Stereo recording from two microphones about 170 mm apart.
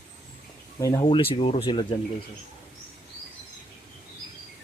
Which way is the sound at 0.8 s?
20° left (ahead or behind).